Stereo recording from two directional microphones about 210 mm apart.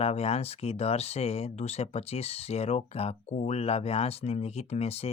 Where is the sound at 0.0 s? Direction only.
30° left (ahead or behind).